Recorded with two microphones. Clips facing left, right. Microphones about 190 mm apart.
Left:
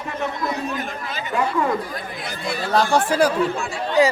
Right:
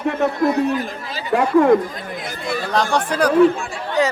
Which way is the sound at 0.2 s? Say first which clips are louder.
Right 7 dB; 60° right (ahead or behind).